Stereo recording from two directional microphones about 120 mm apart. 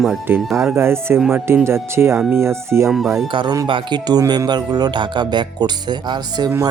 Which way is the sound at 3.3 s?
40° right (ahead or behind).